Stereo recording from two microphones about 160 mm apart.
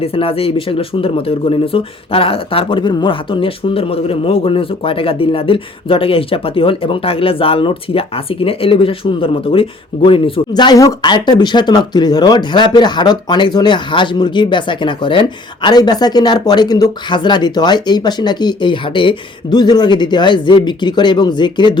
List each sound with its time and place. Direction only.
0.0 s speech: 35° left (ahead or behind)